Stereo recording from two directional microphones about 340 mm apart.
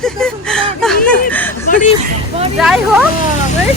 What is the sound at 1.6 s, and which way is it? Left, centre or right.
Speech, left.